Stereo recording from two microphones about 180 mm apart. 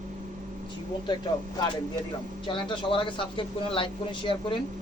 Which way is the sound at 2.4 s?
25° left (ahead or behind).